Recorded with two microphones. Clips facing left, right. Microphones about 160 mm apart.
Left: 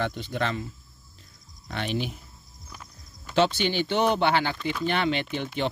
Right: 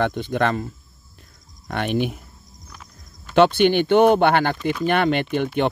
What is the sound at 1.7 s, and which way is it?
Speech, 55° right (ahead or behind).